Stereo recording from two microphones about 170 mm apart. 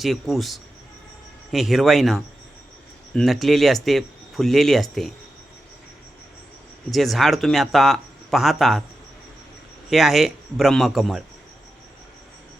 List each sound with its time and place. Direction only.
0.0 s speech: centre (ahead or behind)
6.9 s speech: centre (ahead or behind)
9.9 s speech: centre (ahead or behind)